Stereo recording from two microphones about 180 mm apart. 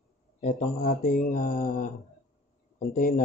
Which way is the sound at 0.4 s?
40° left (ahead or behind).